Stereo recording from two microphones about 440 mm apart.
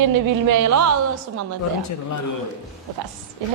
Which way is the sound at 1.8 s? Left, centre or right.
Left.